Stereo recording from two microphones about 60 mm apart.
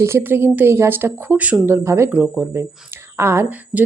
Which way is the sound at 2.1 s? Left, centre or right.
Right.